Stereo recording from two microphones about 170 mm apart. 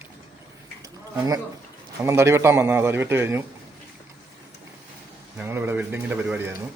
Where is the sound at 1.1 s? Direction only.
20° right (ahead or behind).